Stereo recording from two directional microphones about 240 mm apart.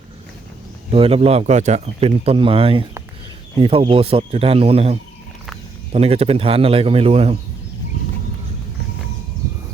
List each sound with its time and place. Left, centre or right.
0.9 s speech: right